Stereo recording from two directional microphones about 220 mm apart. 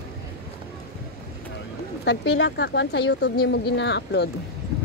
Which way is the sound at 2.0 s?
55° left (ahead or behind).